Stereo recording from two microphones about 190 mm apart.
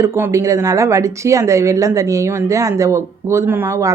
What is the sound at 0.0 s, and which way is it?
Speech, 15° right (ahead or behind).